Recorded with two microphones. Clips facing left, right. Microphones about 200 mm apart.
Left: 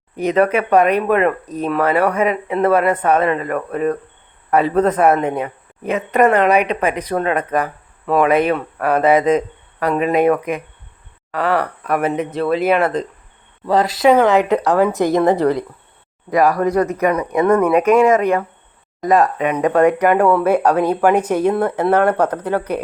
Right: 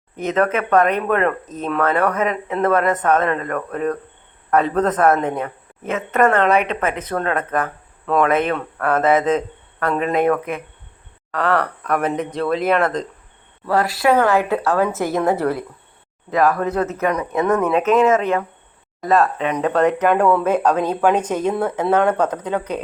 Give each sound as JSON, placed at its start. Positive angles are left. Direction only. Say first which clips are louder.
{"t": 0.2, "sound": "speech", "louder": "left 4 dB", "side_deg": 10}
{"t": 13.7, "sound": "a woman's voice", "louder": "left 4 dB", "side_deg": 20}